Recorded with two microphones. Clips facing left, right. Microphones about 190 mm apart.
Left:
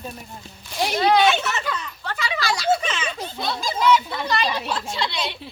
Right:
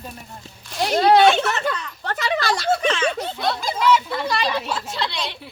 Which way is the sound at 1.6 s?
50° right (ahead or behind).